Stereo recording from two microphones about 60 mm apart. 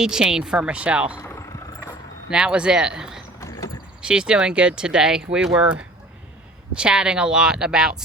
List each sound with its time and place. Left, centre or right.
0.0 s speech: centre
2.3 s speech: centre
6.7 s speech: centre